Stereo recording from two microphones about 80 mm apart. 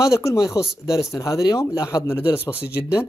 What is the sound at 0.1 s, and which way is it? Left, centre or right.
Speech, left.